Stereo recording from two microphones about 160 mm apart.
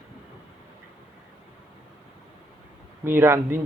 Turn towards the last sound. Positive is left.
turn(degrees=-15)  # may be behind; listen again after turning